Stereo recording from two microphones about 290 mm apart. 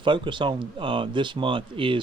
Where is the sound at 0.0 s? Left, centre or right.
Centre.